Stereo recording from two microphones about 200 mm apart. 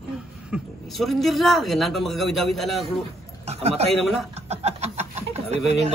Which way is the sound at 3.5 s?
30° right (ahead or behind).